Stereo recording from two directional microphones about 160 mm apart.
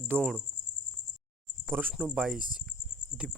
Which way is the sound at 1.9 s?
5° right (ahead or behind).